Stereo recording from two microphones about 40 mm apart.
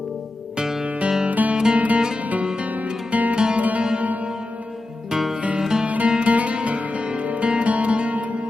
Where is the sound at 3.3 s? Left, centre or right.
Right.